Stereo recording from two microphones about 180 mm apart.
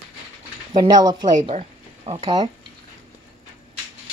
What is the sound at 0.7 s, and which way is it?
Speech, 20° right (ahead or behind).